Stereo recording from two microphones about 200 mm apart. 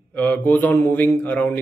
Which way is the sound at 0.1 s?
10° left (ahead or behind).